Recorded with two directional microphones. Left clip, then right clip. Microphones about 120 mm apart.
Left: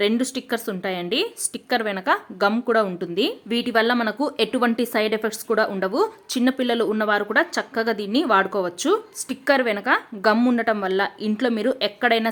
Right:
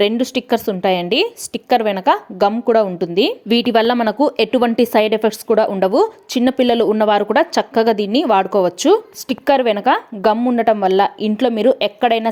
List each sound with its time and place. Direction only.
0.2 s speech: 40° right (ahead or behind)
3.6 s speech: 50° right (ahead or behind)
4.2 s speech: 30° right (ahead or behind)
10.3 s speech: 10° right (ahead or behind)
10.8 s speech: 40° right (ahead or behind)